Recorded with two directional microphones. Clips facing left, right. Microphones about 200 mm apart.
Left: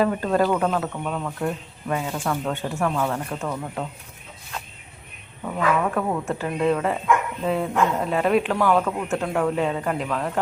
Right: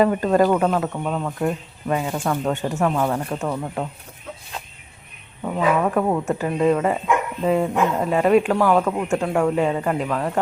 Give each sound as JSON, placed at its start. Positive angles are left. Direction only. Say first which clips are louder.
{"t": 0.0, "sound": "speech", "louder": "right 4 dB", "side_deg": -10}
{"t": 1.0, "sound": "speech", "louder": "right 3 dB", "side_deg": -20}
{"t": 5.5, "sound": "speech", "louder": "right 3 dB", "side_deg": -20}